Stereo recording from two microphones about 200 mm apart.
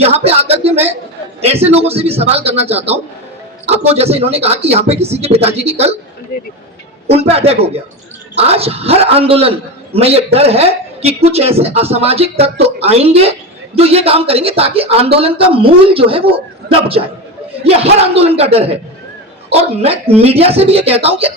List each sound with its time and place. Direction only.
0.0 s a sound: 30° right (ahead or behind)
1.4 s speech: 30° right (ahead or behind)
7.1 s speech: 30° right (ahead or behind)
17.6 s speech: 30° right (ahead or behind)